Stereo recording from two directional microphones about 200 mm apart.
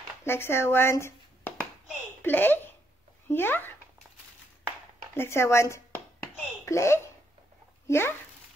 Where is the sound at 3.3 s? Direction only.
10° left (ahead or behind).